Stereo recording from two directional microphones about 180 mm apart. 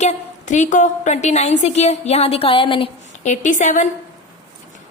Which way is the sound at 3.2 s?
45° left (ahead or behind).